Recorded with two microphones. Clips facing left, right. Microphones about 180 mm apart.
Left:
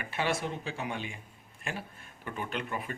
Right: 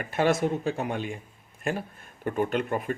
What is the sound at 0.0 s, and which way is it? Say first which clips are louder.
Speech: right 8 dB; 45° right (ahead or behind).